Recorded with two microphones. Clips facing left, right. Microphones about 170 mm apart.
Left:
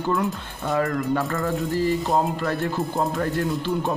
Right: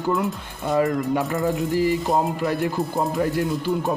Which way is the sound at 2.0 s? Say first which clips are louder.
Right 1 dB; centre (ahead or behind).